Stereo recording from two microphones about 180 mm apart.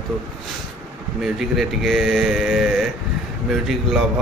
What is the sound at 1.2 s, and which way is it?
Speech, centre (ahead or behind).